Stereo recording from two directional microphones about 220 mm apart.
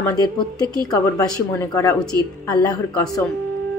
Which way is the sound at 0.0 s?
15° left (ahead or behind).